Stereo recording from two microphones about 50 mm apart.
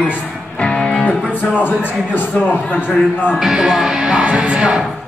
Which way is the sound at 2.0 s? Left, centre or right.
Left.